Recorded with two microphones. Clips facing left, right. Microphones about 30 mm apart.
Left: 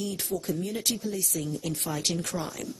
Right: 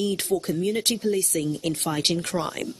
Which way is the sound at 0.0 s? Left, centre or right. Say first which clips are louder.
Right 7 dB; right.